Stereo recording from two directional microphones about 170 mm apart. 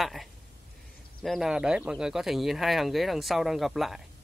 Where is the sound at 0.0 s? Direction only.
Centre (ahead or behind).